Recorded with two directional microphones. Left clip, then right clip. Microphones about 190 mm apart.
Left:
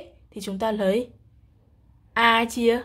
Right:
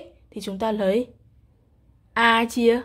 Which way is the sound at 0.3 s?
10° right (ahead or behind).